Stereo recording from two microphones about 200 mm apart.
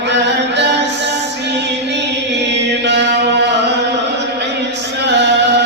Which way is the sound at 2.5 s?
60° right (ahead or behind).